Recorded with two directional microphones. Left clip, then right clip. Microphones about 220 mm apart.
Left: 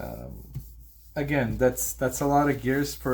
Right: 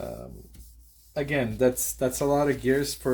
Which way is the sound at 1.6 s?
35° right (ahead or behind).